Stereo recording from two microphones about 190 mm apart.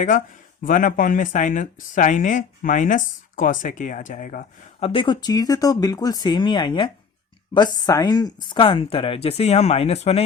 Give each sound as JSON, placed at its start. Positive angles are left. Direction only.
{"t": 0.6, "sound": "speech", "side_deg": 45}
{"t": 4.8, "sound": "speech", "side_deg": 30}